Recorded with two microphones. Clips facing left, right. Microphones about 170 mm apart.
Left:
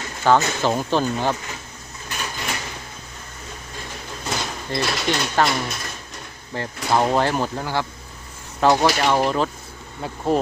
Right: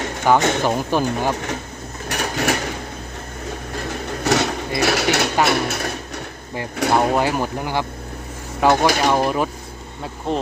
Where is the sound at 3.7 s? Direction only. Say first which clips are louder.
Right 8 dB; 70° right (ahead or behind).